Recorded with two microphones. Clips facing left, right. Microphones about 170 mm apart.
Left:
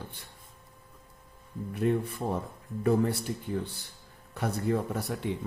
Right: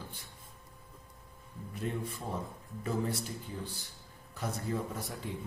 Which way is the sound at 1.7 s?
65° left (ahead or behind).